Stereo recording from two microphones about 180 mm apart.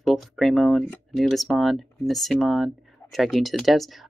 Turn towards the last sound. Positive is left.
turn(degrees=0)  # may be behind; listen again after turning